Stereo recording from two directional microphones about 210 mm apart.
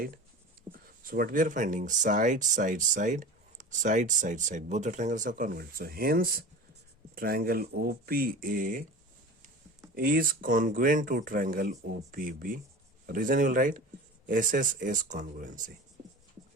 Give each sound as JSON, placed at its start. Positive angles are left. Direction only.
{"t": 0.7, "sound": "speech", "side_deg": -45}
{"t": 9.9, "sound": "speech", "side_deg": -40}